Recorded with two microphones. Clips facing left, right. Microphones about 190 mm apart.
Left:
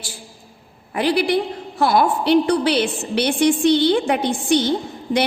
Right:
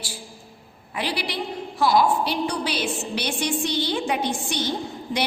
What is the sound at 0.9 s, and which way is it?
A woman's voice, 50° left (ahead or behind).